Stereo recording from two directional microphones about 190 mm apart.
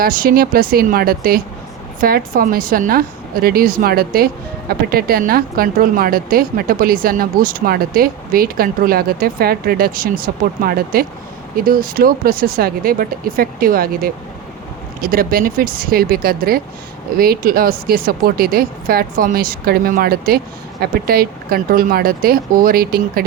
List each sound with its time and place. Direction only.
0.0 s speech: 50° right (ahead or behind)